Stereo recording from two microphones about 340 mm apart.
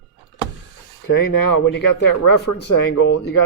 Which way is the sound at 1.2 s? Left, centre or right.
Left.